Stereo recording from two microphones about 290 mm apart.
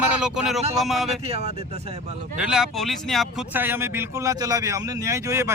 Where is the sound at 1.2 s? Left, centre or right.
Right.